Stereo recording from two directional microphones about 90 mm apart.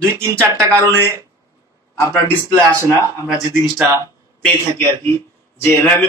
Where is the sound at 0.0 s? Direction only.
30° right (ahead or behind).